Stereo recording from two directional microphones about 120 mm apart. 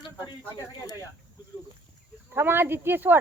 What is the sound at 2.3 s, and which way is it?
Speech, 20° right (ahead or behind).